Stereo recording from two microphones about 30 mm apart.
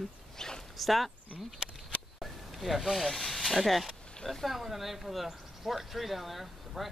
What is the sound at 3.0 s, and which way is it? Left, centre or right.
Speech, centre.